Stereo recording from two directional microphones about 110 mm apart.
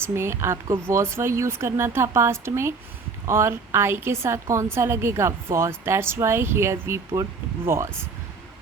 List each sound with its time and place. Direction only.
0.0 s a woman's voice: 25° right (ahead or behind)